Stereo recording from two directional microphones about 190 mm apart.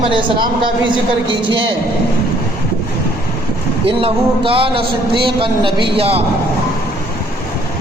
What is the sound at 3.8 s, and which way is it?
A man's voice, 30° right (ahead or behind).